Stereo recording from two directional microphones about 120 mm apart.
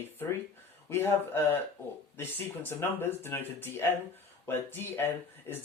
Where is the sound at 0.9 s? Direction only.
20° left (ahead or behind).